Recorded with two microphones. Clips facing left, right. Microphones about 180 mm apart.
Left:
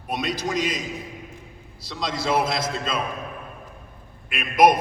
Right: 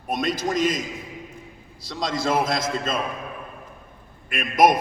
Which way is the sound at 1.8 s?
50° right (ahead or behind).